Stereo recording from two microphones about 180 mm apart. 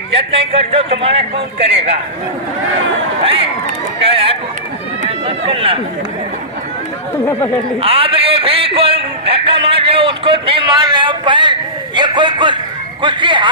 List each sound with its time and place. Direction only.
0.2 s a man's voice: 30° right (ahead or behind)
4.0 s a man's voice: 30° right (ahead or behind)
5.0 s run: 30° right (ahead or behind)
7.8 s a man's voice: 30° right (ahead or behind)